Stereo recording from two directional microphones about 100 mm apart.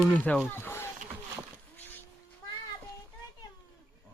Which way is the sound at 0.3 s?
15° left (ahead or behind).